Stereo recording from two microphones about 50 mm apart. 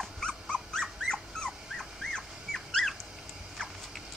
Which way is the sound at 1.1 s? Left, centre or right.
Centre.